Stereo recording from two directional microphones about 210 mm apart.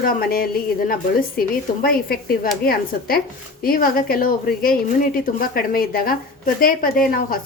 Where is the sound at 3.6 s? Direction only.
45° left (ahead or behind).